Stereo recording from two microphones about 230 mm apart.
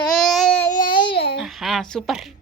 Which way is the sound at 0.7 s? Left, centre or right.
Centre.